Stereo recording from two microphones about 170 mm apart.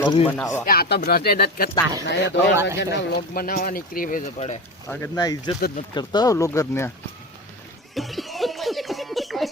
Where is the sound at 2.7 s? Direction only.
75° left (ahead or behind); by 4.2 s 55° left (ahead or behind).